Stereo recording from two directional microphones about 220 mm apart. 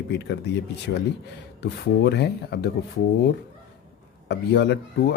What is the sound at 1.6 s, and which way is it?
Speech, 45° left (ahead or behind).